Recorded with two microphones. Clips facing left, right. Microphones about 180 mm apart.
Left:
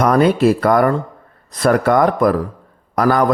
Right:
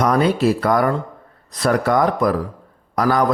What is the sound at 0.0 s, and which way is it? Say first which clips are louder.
Speech: left 4 dB; 55° left (ahead or behind).